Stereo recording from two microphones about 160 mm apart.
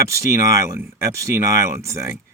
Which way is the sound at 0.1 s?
20° right (ahead or behind).